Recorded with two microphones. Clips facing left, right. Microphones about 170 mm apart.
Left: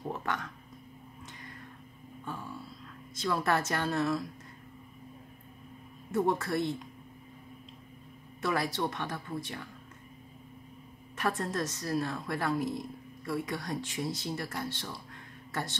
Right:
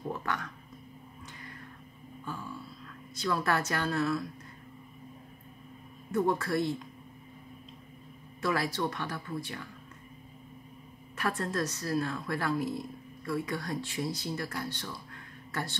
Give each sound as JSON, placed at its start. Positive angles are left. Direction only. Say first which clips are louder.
{"t": 3.2, "sound": "a woman's voice", "louder": "even", "side_deg": 20}
{"t": 6.1, "sound": "a woman's voice", "louder": "right 1 dB", "side_deg": 20}
{"t": 8.4, "sound": "a woman's voice", "louder": "even", "side_deg": 20}
{"t": 11.1, "sound": "a woman's voice", "louder": "even", "side_deg": 20}